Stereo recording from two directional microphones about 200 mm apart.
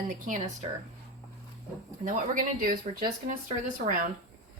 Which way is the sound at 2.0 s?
40° right (ahead or behind).